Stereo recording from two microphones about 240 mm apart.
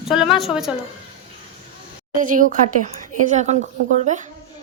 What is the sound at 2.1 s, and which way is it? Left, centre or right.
A woman's voice, right.